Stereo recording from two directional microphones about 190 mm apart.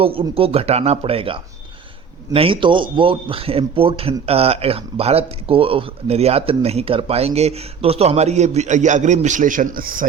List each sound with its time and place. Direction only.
0.0 s a man's voice: 30° right (ahead or behind); by 10.1 s 45° right (ahead or behind)